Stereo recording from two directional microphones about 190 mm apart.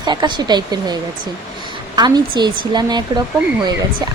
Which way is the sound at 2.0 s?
20° right (ahead or behind).